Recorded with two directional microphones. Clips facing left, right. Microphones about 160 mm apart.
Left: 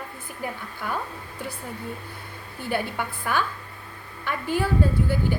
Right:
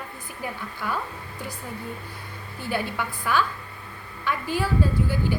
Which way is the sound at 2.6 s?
50° left (ahead or behind).